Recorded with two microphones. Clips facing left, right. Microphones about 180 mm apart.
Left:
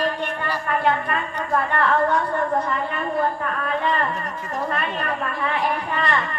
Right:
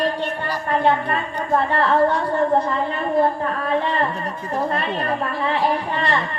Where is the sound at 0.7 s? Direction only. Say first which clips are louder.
Right 3 dB; 30° right (ahead or behind).